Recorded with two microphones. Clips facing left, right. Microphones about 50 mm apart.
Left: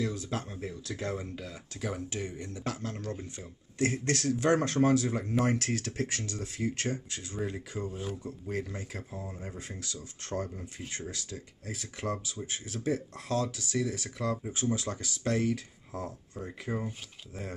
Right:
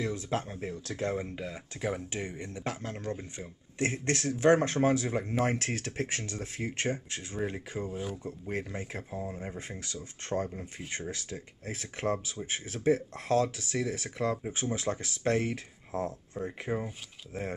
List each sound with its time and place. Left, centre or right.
0.0 s speech: right
7.9 s speech: centre
8.3 s speech: right